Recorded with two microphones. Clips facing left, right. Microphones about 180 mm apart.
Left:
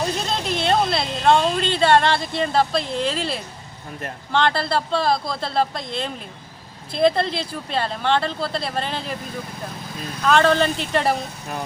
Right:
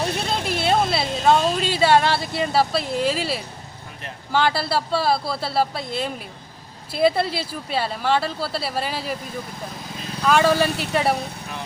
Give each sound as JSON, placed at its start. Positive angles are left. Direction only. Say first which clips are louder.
{"t": 0.3, "sound": "a woman's voice", "louder": "right 1 dB", "side_deg": -5}
{"t": 10.2, "sound": "speech", "louder": "left 1 dB", "side_deg": -10}